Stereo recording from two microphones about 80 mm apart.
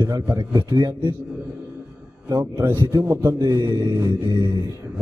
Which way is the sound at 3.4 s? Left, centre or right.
Right.